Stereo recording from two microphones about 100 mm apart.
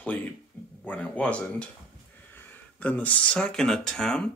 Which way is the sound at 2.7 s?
15° left (ahead or behind).